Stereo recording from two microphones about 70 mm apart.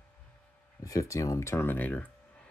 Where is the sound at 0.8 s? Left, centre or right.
Left.